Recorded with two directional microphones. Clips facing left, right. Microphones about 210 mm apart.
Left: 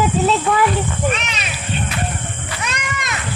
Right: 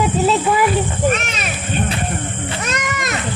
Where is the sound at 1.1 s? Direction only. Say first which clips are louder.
Right 3 dB; 45° right (ahead or behind).